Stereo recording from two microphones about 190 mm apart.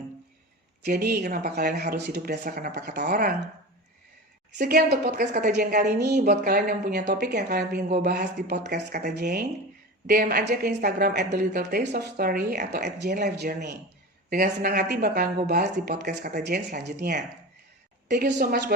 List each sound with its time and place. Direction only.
0.9 s speech: 55° right (ahead or behind)
4.5 s speech: 55° right (ahead or behind)
7.0 s speech: 60° right (ahead or behind)
14.3 s speech: 45° right (ahead or behind)